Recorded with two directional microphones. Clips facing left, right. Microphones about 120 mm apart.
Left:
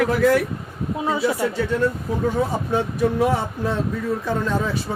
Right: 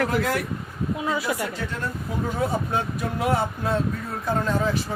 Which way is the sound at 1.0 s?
25° left (ahead or behind).